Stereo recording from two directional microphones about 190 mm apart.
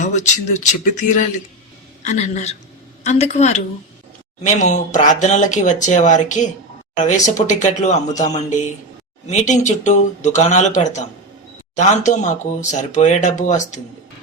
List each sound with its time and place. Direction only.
0.0 s speech: 40° left (ahead or behind)